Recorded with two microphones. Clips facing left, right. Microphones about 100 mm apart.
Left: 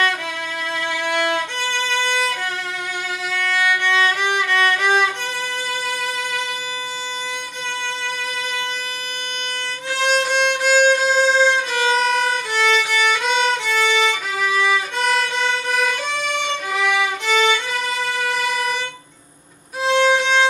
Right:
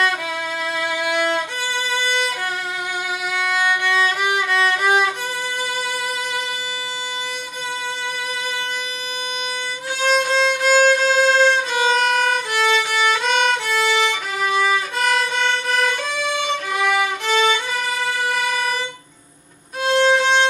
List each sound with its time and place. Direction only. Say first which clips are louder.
0.9 s violin: even; 10° right (ahead or behind)
3.3 s violin: even; 10° right (ahead or behind)
9.9 s violin: right 1 dB; 5° left (ahead or behind)
16.3 s violin: right 1 dB; centre (ahead or behind)
19.8 s violin: even; centre (ahead or behind)